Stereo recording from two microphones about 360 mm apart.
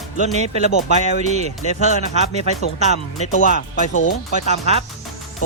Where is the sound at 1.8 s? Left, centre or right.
Centre.